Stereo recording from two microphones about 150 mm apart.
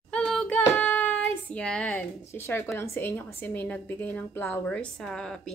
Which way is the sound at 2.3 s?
15° left (ahead or behind).